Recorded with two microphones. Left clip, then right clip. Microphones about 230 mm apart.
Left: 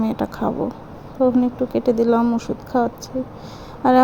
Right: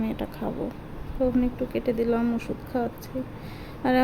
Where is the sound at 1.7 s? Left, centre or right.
Centre.